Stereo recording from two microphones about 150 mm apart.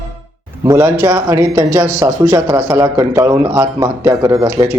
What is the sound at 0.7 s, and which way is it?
A man's voice, 20° right (ahead or behind).